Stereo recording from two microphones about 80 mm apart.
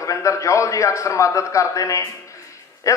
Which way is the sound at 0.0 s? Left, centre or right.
Left.